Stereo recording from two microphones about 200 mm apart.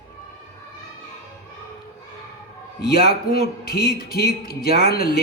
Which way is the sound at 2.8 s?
50° left (ahead or behind).